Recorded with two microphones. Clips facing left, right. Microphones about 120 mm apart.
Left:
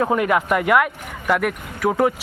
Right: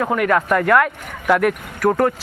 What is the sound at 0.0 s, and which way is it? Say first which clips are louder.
Speech: right 1 dB; 20° left (ahead or behind).